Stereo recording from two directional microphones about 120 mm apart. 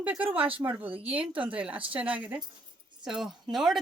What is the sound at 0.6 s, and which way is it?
A woman's voice, 15° right (ahead or behind).